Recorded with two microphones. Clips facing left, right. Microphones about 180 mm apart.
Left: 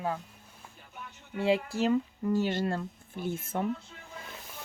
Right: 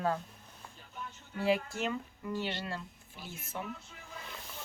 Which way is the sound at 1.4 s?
30° left (ahead or behind).